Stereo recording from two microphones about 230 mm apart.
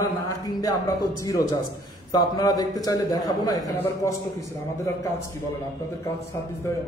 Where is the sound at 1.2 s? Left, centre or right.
Centre.